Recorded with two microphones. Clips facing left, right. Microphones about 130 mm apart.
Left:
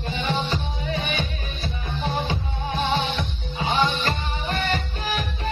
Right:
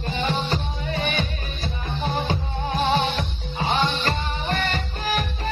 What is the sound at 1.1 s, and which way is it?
Music, 40° right (ahead or behind).